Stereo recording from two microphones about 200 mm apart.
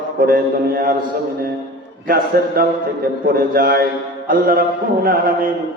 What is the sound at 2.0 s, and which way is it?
A man's voice, 45° right (ahead or behind).